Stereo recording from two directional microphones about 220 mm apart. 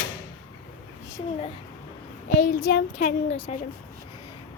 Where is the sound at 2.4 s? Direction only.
40° left (ahead or behind).